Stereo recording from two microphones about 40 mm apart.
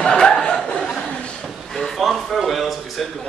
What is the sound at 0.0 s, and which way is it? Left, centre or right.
Chuckle, centre.